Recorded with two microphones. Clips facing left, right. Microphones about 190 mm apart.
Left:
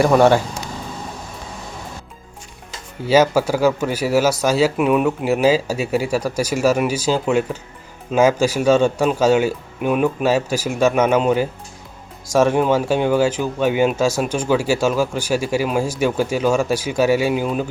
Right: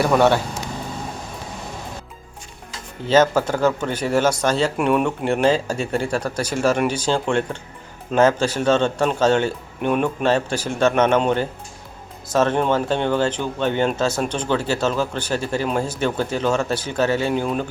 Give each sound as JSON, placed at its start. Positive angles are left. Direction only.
{"t": 0.0, "sound": "speech", "side_deg": 10}
{"t": 3.1, "sound": "speech", "side_deg": 10}